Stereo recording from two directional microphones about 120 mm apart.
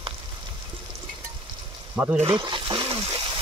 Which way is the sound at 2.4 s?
40° right (ahead or behind).